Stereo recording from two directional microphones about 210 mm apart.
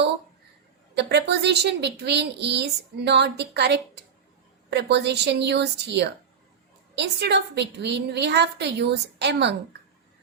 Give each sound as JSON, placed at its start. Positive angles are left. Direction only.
{"t": 0.9, "sound": "a woman's voice", "side_deg": -55}